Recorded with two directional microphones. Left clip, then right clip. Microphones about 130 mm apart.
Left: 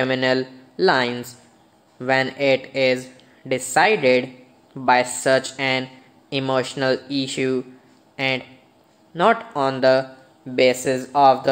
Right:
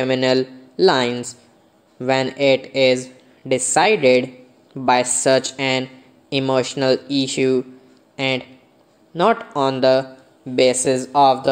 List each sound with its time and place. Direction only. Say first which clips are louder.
0.0 s a man's voice: right 2 dB; 20° right (ahead or behind)